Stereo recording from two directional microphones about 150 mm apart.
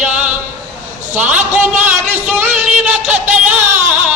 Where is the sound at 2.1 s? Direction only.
10° right (ahead or behind).